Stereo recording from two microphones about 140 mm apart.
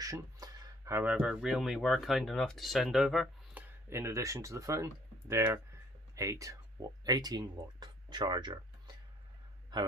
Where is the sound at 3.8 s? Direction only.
20° right (ahead or behind); by 8.5 s 35° right (ahead or behind).